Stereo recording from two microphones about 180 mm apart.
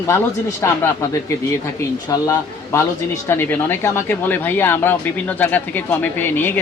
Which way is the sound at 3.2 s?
15° left (ahead or behind).